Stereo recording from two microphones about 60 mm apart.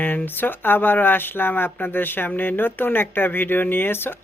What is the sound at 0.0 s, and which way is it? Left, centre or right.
Speech, left.